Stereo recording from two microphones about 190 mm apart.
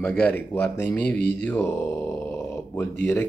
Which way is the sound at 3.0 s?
10° left (ahead or behind).